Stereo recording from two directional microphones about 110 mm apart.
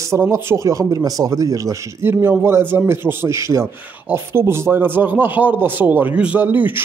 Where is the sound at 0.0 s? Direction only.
25° right (ahead or behind).